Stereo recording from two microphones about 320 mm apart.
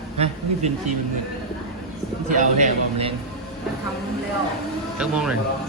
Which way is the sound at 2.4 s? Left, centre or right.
Right.